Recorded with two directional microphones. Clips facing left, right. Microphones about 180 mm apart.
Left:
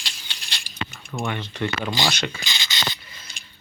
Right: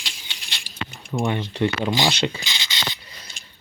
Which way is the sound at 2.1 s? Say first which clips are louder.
Right 4 dB; 30° right (ahead or behind).